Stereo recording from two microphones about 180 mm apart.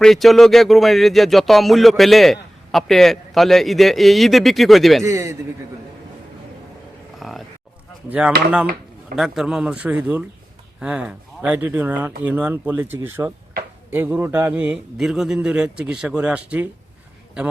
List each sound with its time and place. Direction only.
0.0 s speech: centre (ahead or behind)
5.0 s a man's voice: 15° right (ahead or behind)
7.2 s a man's voice: centre (ahead or behind)